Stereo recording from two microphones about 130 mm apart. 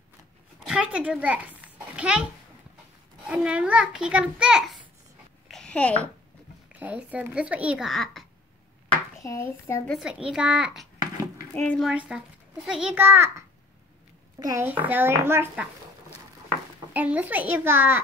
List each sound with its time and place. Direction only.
0.7 s a child's voice: 10° right (ahead or behind)
3.3 s a child's voice: 10° right (ahead or behind)
5.5 s babbling: 5° left (ahead or behind)
6.8 s a child's voice: 10° right (ahead or behind)
7.9 s a child's voice: centre (ahead or behind)
9.2 s a child's voice: 25° left (ahead or behind)
9.9 s a woman's voice: 5° right (ahead or behind)
11.0 s a sound: 25° right (ahead or behind)
11.5 s speech: 10° left (ahead or behind)
11.8 s a child's voice: 5° right (ahead or behind)
12.9 s a child's voice: 15° right (ahead or behind)
14.4 s a child's voice: 25° right (ahead or behind)
14.7 s a child's voice: 15° right (ahead or behind)
16.9 s a child's voice: 10° right (ahead or behind)